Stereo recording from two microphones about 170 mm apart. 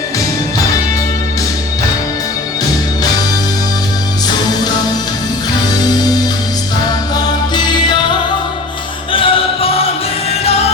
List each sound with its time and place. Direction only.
9.1 s music: 30° left (ahead or behind)